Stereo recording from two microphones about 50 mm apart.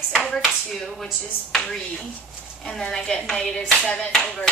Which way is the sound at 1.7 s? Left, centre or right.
Centre.